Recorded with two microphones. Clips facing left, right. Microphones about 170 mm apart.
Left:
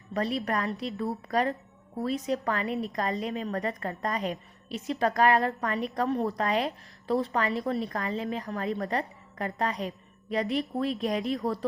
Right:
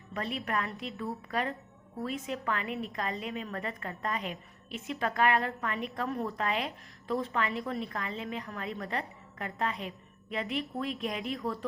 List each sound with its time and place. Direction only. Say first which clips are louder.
0.1 s a woman's voice: left 5 dB; 35° left (ahead or behind)